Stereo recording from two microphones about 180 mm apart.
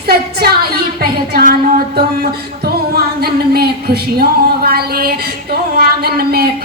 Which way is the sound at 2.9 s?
60° right (ahead or behind).